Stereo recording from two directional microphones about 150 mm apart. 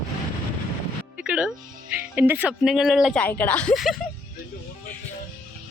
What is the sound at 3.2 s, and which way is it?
Speech, 10° left (ahead or behind).